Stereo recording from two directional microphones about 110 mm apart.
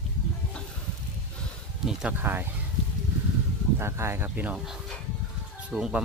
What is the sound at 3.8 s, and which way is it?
Speech, 25° right (ahead or behind).